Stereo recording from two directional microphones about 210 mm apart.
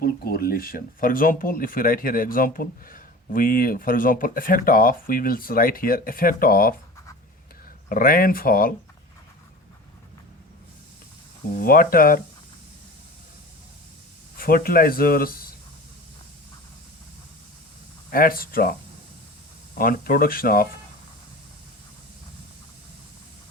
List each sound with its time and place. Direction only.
0.0 s speech: 45° left (ahead or behind)
7.9 s speech: 45° left (ahead or behind)
11.5 s speech: 45° left (ahead or behind)
14.3 s speech: 45° left (ahead or behind)
18.1 s speech: 45° left (ahead or behind)